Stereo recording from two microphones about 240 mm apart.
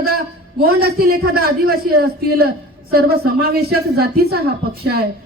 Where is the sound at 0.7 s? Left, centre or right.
Right.